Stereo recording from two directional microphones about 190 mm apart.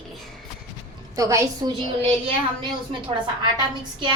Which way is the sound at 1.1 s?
15° right (ahead or behind).